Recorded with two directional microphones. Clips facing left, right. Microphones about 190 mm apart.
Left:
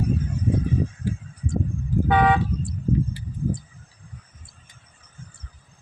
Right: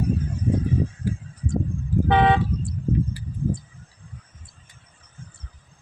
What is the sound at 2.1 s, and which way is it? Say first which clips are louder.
Vehicle: right 1 dB; 25° right (ahead or behind).